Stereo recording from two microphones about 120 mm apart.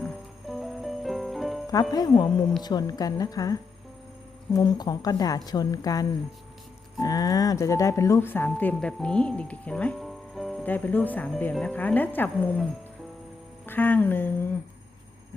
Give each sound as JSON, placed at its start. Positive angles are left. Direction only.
{"t": 0.0, "sound": "music", "side_deg": 0}
{"t": 1.9, "sound": "a woman's voice", "side_deg": 35}
{"t": 10.6, "sound": "speech", "side_deg": 15}
{"t": 13.7, "sound": "speech", "side_deg": 15}